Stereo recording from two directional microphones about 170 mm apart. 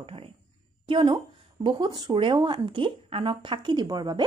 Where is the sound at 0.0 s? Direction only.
35° right (ahead or behind).